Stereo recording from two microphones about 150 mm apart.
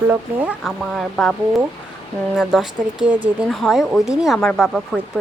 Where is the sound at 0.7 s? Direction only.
Centre (ahead or behind).